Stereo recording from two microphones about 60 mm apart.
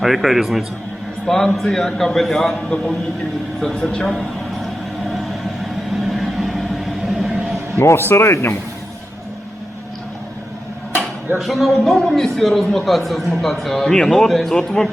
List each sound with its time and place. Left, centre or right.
0.0 s a man's voice: centre
3.6 s a sound: centre
6.0 s vehicle: centre
7.8 s speech: left
11.3 s a man's voice: centre